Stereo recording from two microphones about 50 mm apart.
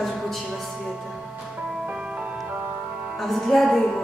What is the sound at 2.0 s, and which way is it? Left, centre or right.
Music, centre.